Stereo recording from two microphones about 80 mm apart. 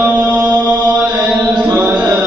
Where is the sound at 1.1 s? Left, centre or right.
Centre.